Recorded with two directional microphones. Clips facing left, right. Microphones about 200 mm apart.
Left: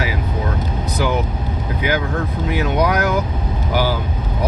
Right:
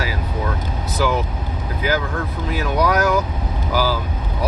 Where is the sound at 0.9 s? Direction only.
20° left (ahead or behind).